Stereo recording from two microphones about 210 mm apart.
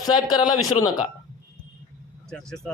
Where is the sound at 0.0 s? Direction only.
20° left (ahead or behind).